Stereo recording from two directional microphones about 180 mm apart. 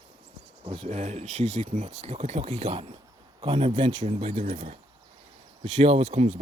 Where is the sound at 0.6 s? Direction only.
30° right (ahead or behind).